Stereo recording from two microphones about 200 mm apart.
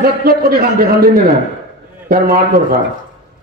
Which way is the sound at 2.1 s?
45° right (ahead or behind).